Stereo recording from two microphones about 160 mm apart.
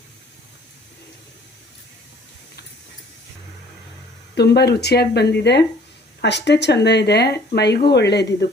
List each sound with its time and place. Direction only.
4.4 s speech: 90° left